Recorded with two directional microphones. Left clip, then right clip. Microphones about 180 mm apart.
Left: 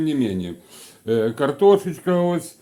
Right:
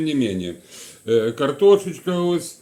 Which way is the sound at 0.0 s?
40° left (ahead or behind).